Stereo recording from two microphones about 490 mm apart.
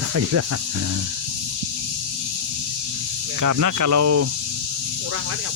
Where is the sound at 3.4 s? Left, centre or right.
Right.